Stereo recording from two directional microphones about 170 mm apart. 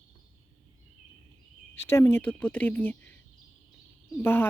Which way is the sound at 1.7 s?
15° left (ahead or behind).